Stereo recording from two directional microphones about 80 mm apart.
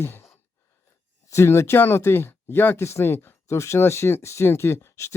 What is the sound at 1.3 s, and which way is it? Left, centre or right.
Speech, left.